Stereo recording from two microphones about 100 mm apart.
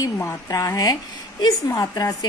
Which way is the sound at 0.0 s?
35° left (ahead or behind).